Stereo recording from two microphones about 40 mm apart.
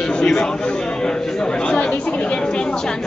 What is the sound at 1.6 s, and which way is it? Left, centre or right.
Speech, centre.